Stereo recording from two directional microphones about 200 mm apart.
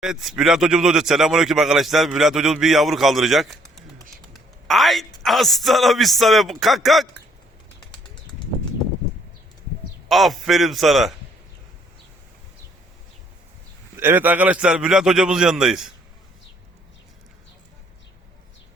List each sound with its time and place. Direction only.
0.0 s speech: centre (ahead or behind)
10.1 s speech: centre (ahead or behind)
13.9 s speech: 10° right (ahead or behind)